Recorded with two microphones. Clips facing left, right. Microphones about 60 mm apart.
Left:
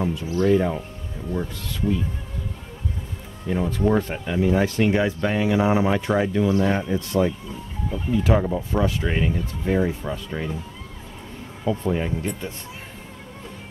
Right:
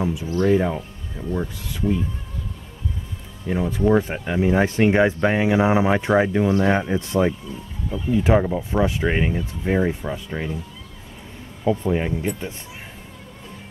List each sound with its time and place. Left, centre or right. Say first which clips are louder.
0.0 s speech: right 1 dB; centre
3.4 s speech: right 2 dB; centre
11.8 s speech: right 2 dB; centre